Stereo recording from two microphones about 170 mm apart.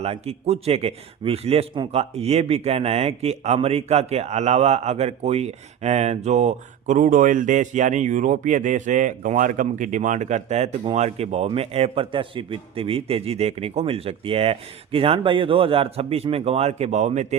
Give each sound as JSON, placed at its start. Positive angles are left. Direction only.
{"t": 0.0, "sound": "a man's voice", "side_deg": -35}